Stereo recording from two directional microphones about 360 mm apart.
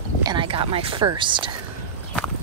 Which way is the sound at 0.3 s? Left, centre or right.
Centre.